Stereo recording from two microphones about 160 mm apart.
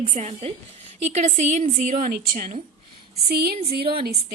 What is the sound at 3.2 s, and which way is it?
Speech, 70° right (ahead or behind).